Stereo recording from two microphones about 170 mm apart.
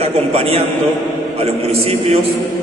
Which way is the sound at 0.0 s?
35° right (ahead or behind).